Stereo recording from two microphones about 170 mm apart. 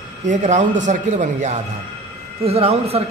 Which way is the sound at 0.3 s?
45° right (ahead or behind).